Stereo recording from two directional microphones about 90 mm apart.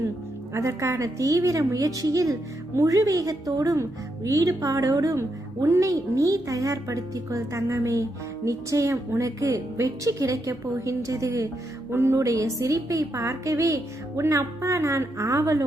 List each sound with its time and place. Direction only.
0.5 s a woman's voice: 35° right (ahead or behind)